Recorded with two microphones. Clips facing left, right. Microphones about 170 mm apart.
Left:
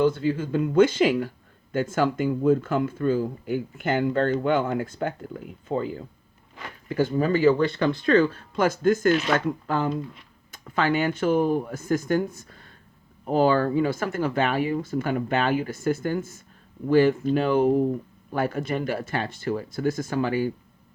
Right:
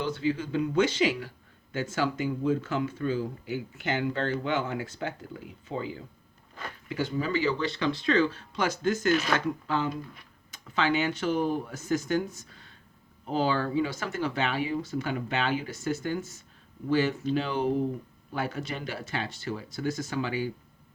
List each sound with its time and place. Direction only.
0.0 s speech: 50° left (ahead or behind)